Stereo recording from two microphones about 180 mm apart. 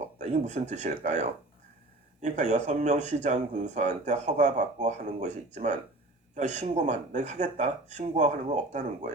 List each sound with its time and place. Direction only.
0.2 s speech: 40° right (ahead or behind)